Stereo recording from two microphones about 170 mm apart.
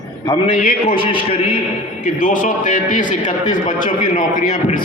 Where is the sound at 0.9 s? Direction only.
35° left (ahead or behind).